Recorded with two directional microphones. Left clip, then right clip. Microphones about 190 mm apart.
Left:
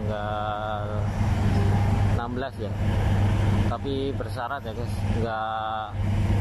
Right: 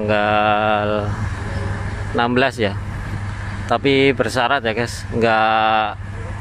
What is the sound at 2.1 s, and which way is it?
Speech, 45° right (ahead or behind).